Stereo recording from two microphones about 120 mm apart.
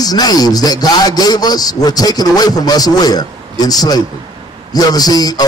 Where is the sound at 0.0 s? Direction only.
35° left (ahead or behind).